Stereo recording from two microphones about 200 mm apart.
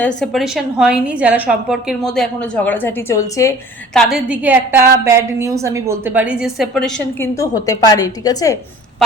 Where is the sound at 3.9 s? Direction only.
5° right (ahead or behind).